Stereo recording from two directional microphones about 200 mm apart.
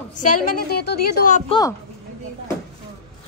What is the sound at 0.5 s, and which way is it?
Speech, 50° left (ahead or behind).